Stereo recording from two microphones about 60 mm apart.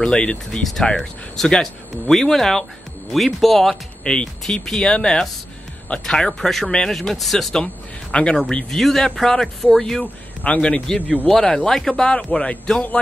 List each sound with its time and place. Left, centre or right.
0.0 s speech: centre
7.6 s speech: centre
10.4 s a man's voice: left
11.2 s speech: centre